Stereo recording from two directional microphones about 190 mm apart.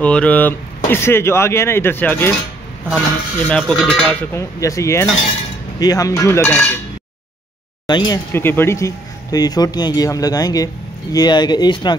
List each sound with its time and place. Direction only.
0.0 s cutlery: 5° left (ahead or behind)
3.4 s cutlery: 5° left (ahead or behind)
7.8 s speech: 20° left (ahead or behind)
8.3 s speech: 10° left (ahead or behind)